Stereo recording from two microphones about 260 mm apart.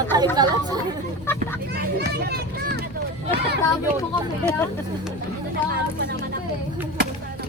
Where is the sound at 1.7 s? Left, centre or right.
Right.